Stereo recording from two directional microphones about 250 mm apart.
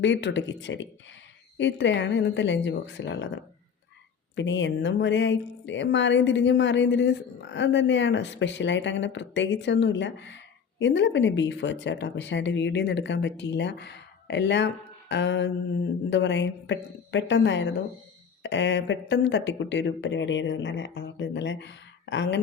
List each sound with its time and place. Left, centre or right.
0.0 s speech: left
4.4 s speech: left